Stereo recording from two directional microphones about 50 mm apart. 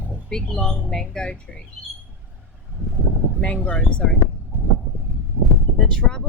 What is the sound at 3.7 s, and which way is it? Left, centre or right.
Speech, centre.